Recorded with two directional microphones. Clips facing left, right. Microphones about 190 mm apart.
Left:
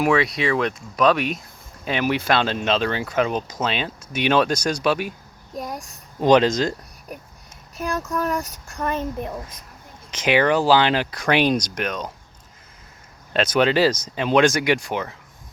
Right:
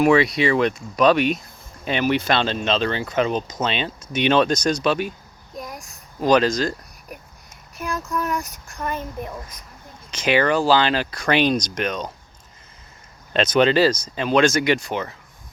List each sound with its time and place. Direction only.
0.0 s speech: centre (ahead or behind)
5.5 s child singing: 35° left (ahead or behind)
6.1 s speech: 20° left (ahead or behind)
7.8 s speech: 35° left (ahead or behind)
10.1 s speech: 15° left (ahead or behind)
13.3 s speech: 5° left (ahead or behind)